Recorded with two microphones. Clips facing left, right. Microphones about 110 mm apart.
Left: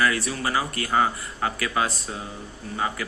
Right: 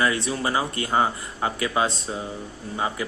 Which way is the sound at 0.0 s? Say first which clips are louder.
Right 1 dB; 25° right (ahead or behind).